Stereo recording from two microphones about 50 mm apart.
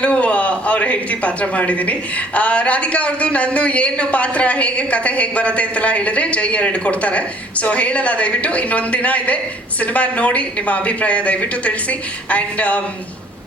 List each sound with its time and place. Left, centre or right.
0.0 s a man's voice: left